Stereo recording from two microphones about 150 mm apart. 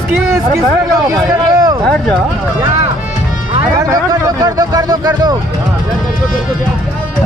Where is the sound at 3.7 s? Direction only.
25° right (ahead or behind).